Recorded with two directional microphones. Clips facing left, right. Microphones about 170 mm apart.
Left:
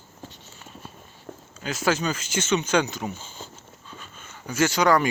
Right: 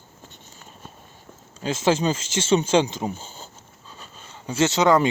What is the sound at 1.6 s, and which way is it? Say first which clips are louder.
Speech: right 4 dB; 25° right (ahead or behind).